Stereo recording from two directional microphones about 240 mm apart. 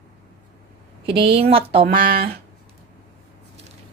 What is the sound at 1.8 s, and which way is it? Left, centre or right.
Speech, right.